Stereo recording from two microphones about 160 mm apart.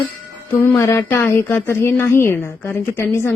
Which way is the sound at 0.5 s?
15° left (ahead or behind).